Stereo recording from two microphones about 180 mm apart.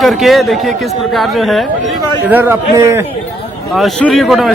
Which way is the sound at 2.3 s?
10° right (ahead or behind).